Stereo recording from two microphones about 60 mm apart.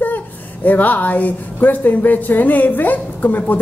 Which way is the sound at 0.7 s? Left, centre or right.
Left.